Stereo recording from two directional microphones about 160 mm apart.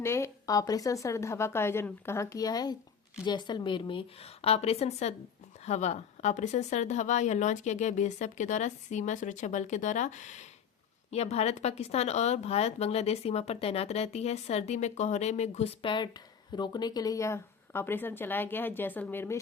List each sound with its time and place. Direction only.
0.0 s a woman's voice: 15° left (ahead or behind)